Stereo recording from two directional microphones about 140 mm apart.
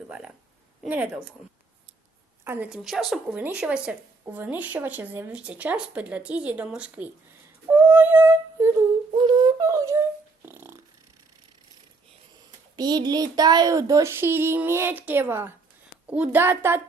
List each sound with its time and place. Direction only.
0.1 s speech: 5° right (ahead or behind)
2.4 s a woman's voice: 15° right (ahead or behind)
2.6 s speech: 5° right (ahead or behind)
7.7 s a sound: 15° right (ahead or behind)
9.1 s a sound: 30° right (ahead or behind)
12.7 s speech: 30° right (ahead or behind)